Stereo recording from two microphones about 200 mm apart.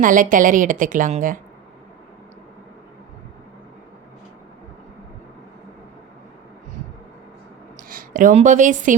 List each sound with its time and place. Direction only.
0.0 s a woman's voice: 40° right (ahead or behind)
7.9 s a woman's voice: 45° right (ahead or behind)